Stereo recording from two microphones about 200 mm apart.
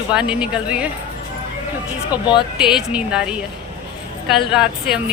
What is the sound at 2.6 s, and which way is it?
Speech, 5° right (ahead or behind).